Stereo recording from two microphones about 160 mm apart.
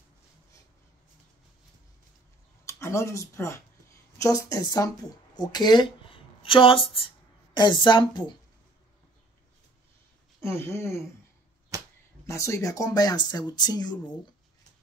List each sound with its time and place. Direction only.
2.6 s speech: 20° left (ahead or behind)
10.4 s speech: 15° left (ahead or behind)
11.7 s a sound: 20° right (ahead or behind)
12.3 s speech: 20° left (ahead or behind)